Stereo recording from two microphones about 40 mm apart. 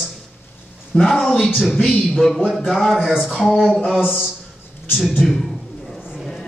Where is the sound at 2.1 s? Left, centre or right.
Centre.